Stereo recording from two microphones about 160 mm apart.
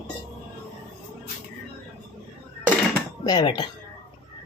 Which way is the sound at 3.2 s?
25° left (ahead or behind).